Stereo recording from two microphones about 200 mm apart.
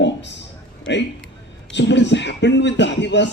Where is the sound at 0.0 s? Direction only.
60° left (ahead or behind).